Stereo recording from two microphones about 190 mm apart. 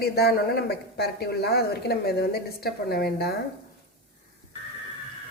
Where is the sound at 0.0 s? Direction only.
55° left (ahead or behind).